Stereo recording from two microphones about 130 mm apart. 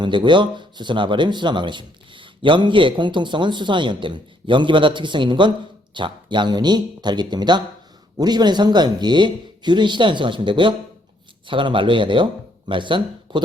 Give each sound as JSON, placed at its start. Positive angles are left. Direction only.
{"t": 0.0, "sound": "speech", "side_deg": -35}